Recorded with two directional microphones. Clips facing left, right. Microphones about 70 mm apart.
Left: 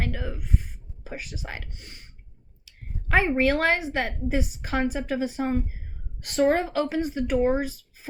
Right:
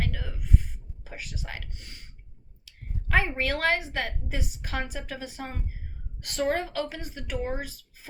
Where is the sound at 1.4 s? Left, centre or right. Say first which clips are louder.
Left 2 dB; left.